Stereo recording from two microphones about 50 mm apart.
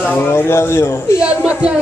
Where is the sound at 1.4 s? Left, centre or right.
Centre.